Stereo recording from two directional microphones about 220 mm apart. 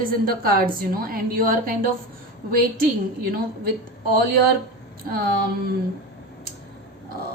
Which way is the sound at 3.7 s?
45° right (ahead or behind).